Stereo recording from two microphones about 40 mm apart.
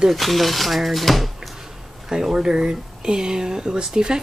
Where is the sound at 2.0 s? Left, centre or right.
Centre.